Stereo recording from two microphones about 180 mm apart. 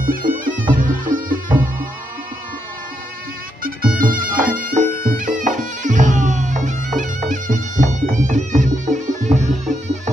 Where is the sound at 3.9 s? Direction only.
50° right (ahead or behind).